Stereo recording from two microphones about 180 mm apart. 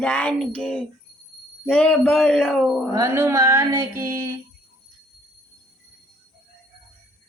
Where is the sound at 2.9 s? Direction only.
15° right (ahead or behind).